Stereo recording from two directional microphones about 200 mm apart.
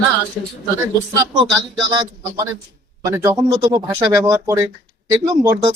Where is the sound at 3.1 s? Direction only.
15° right (ahead or behind).